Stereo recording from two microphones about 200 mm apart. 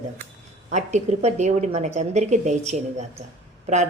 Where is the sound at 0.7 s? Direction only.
35° right (ahead or behind).